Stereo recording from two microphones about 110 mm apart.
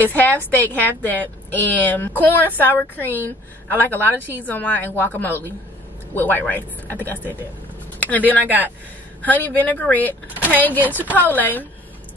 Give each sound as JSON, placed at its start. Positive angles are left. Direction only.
{"t": 0.0, "sound": "a woman's voice", "side_deg": 15}
{"t": 8.0, "sound": "a sound", "side_deg": 15}
{"t": 8.3, "sound": "speech", "side_deg": -15}
{"t": 9.2, "sound": "a woman's voice", "side_deg": 15}